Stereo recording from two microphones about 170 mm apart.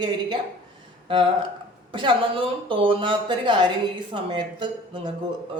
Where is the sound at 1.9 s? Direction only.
30° right (ahead or behind).